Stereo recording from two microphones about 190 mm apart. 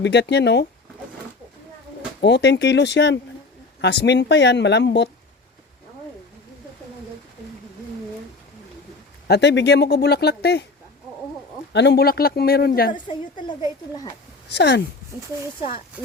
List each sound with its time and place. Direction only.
0.0 s speech: 65° left (ahead or behind)
2.2 s speech: 65° left (ahead or behind)
9.2 s speech: 65° left (ahead or behind)
11.7 s speech: 65° left (ahead or behind)
14.5 s speech: 65° left (ahead or behind)